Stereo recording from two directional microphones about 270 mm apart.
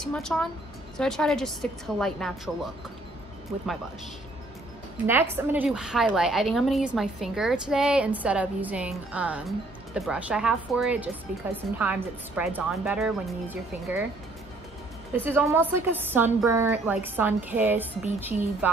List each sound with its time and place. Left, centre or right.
0.0 s a woman's voice: centre
5.0 s a woman's voice: centre
15.1 s a woman's voice: centre